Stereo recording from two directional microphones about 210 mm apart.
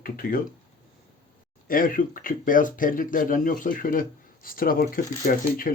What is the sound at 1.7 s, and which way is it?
Speech, 40° left (ahead or behind).